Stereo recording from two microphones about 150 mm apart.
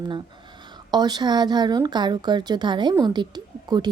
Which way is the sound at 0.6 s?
30° right (ahead or behind).